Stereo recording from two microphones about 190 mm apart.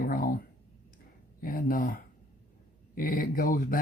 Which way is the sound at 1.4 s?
50° left (ahead or behind).